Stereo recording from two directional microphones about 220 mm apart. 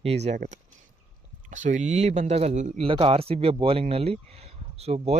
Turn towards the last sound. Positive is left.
turn(degrees=-30)  # may be behind; listen again after turning